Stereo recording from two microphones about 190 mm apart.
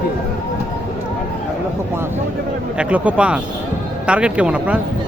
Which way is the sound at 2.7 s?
5° right (ahead or behind).